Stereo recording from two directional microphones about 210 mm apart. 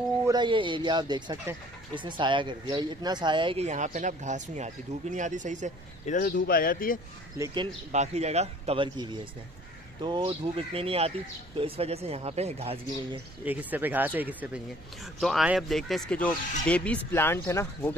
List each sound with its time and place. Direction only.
0.2 s speech: 20° right (ahead or behind); by 5.7 s 35° right (ahead or behind)
6.0 s speech: 40° left (ahead or behind)
7.3 s speech: 15° right (ahead or behind)
7.9 s speech: 30° right (ahead or behind)
13.5 s speech: 10° right (ahead or behind); by 17.9 s 10° left (ahead or behind)